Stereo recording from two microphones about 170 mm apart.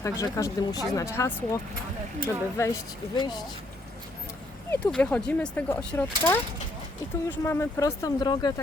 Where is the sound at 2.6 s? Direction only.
20° left (ahead or behind).